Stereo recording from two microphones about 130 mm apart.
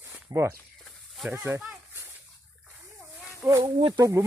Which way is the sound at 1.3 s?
20° right (ahead or behind).